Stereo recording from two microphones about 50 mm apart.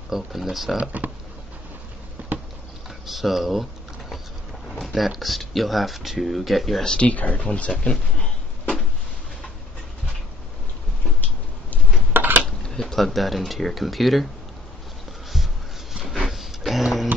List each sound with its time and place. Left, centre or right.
0.1 s speech: centre
0.7 s speech: right
2.2 s insect: right
3.1 s speech: centre
4.6 s speech: centre
6.8 s speech: centre
7.1 s speech: left
7.8 s speech: centre
12.1 s dishes: right
12.6 s speech: centre
15.9 s printer: centre